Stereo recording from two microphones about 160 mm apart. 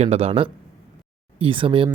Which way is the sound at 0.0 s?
40° right (ahead or behind).